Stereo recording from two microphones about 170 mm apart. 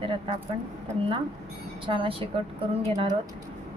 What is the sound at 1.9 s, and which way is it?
Speech, 30° right (ahead or behind).